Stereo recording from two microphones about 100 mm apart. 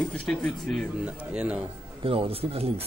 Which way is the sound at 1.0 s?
10° right (ahead or behind).